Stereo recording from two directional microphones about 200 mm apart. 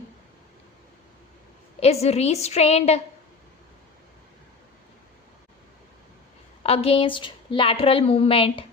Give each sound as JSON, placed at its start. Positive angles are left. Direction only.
{"t": 1.8, "sound": "a woman's voice", "side_deg": 30}
{"t": 6.6, "sound": "a woman's voice", "side_deg": 30}